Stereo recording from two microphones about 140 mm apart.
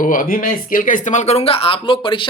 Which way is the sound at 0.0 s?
70° left (ahead or behind).